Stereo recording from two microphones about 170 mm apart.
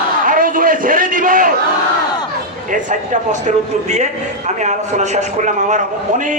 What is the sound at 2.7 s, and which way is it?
A man's voice, 45° right (ahead or behind).